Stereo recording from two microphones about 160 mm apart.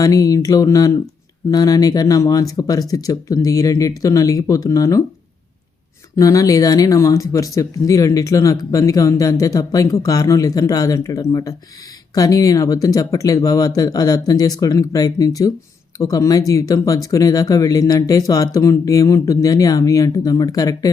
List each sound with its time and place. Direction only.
0.0 s speech: 20° left (ahead or behind)
6.1 s speech: 20° left (ahead or behind)